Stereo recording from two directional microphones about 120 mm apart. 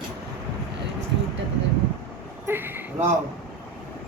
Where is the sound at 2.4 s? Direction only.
20° right (ahead or behind).